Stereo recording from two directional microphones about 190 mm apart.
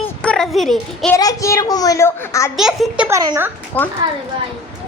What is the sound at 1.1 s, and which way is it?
A child's voice, 20° left (ahead or behind).